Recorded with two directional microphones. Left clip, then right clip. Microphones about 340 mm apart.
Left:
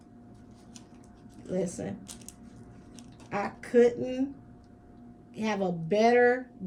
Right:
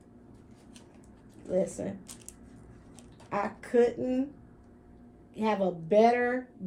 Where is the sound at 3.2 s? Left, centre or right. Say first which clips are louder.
Right 1 dB; centre.